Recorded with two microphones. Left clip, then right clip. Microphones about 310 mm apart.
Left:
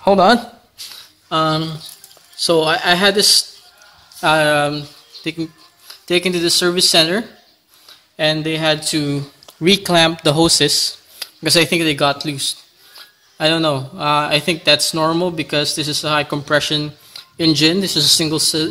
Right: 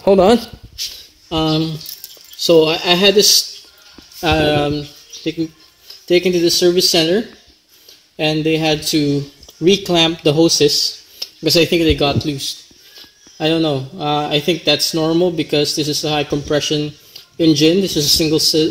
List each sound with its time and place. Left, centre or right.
0.0 s speech: left
8.2 s speech: left